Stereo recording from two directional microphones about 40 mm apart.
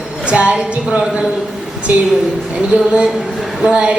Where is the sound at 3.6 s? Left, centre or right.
Right.